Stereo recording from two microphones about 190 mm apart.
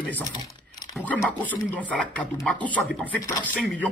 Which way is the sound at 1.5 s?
10° left (ahead or behind).